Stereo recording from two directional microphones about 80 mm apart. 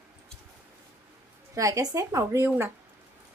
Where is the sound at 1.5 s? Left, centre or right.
Right.